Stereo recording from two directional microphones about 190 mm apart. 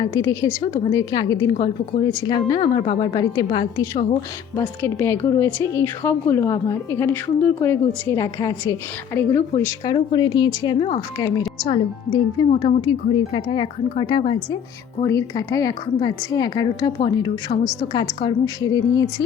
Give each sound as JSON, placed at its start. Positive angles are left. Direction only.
{"t": 0.0, "sound": "a woman's voice", "side_deg": 20}
{"t": 4.5, "sound": "a woman's voice", "side_deg": 15}